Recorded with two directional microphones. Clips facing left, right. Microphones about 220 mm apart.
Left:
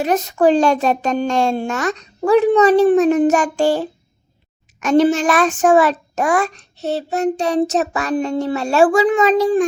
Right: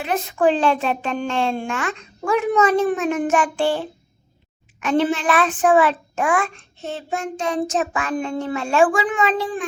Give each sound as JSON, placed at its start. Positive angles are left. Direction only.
{"t": 0.0, "sound": "a child's voice", "side_deg": 40}